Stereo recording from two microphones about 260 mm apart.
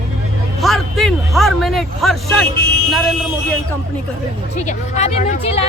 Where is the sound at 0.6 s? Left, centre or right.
Centre.